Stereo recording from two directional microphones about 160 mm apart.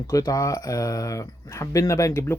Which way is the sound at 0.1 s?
20° left (ahead or behind).